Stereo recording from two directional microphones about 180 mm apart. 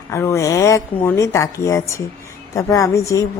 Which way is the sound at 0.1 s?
15° left (ahead or behind).